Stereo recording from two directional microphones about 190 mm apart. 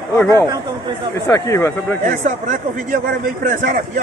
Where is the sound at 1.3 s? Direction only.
15° left (ahead or behind).